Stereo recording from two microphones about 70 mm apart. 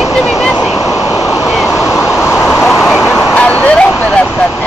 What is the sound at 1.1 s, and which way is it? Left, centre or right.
Vehicle, centre.